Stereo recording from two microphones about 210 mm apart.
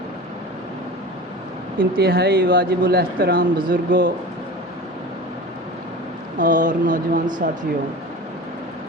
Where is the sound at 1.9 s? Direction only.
50° right (ahead or behind).